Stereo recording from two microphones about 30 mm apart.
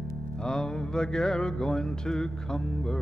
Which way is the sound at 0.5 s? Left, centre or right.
Left.